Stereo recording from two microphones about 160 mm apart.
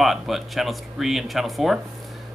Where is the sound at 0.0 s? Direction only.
Centre (ahead or behind).